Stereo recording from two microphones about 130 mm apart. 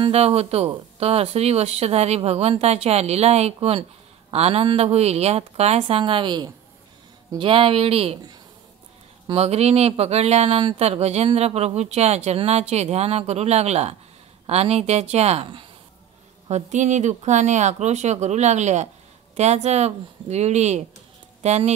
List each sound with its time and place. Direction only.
0.0 s speech: 50° right (ahead or behind)
9.3 s speech: 50° right (ahead or behind)
16.4 s speech: 65° right (ahead or behind)